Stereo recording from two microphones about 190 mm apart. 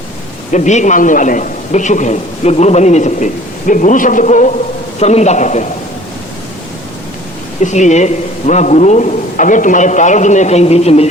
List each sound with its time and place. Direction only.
0.5 s a man's voice: 40° left (ahead or behind)
7.6 s a man's voice: 40° left (ahead or behind)